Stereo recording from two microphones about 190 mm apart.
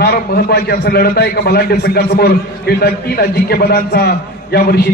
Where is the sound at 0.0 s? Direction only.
55° left (ahead or behind).